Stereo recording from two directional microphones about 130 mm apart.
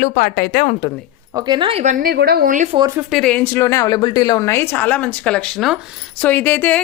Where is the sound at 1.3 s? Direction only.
30° right (ahead or behind).